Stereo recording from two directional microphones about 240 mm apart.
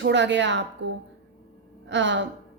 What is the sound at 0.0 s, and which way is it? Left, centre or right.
A woman's voice, right.